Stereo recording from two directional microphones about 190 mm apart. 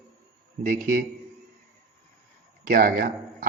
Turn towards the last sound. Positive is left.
turn(degrees=-50)  # may be behind; listen again after turning